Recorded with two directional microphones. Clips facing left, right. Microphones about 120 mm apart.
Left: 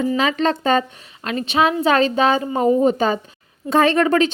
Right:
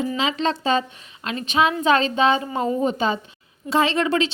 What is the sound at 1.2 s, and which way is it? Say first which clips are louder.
Speech: left 2 dB; 40° left (ahead or behind).